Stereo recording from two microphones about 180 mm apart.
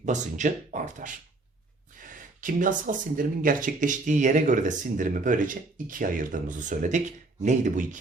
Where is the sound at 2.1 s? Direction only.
45° right (ahead or behind).